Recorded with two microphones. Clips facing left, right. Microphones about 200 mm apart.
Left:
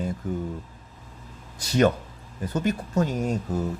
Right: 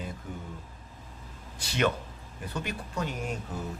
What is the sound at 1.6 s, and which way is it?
A man's voice, 40° left (ahead or behind).